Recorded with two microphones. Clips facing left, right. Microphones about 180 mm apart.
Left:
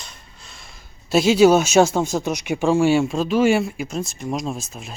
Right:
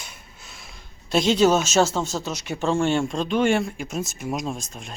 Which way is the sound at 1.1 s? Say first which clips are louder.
Left 5 dB; 5° left (ahead or behind).